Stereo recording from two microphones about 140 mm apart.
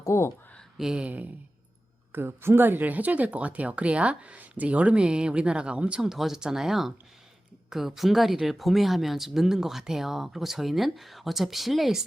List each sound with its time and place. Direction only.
0.0 s speech: 20° left (ahead or behind)
0.8 s speech: 5° right (ahead or behind)